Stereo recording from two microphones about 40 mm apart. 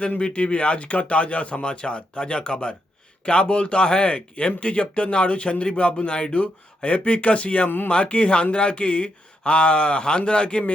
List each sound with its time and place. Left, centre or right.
0.3 s speech: left